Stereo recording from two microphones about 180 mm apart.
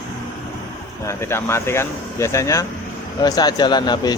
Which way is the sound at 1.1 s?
15° left (ahead or behind).